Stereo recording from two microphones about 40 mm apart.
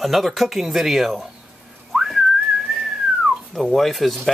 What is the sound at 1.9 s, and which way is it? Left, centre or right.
Whistling, centre.